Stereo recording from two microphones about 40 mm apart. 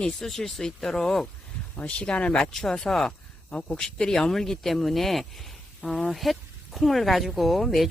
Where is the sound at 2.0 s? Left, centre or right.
Left.